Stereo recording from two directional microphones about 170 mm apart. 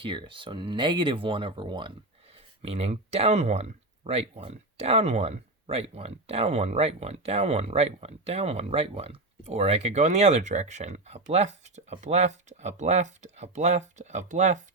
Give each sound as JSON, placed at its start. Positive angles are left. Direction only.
{"t": 0.0, "sound": "speech", "side_deg": -30}